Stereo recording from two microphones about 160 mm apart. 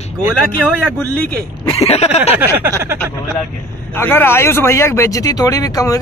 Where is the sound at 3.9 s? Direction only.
15° left (ahead or behind).